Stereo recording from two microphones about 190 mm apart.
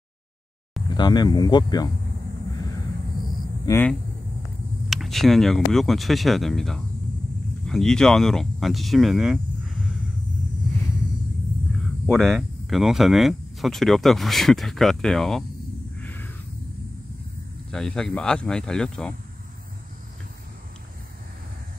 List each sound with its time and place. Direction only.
0.8 s speech: 20° left (ahead or behind)
3.6 s speech: 10° left (ahead or behind)
4.8 s speech: centre (ahead or behind)
12.1 s speech: centre (ahead or behind)
16.0 s a sound: 10° left (ahead or behind)
17.6 s speech: 5° left (ahead or behind)